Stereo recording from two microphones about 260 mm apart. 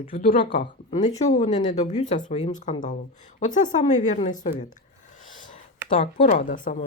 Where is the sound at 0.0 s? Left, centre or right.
Left.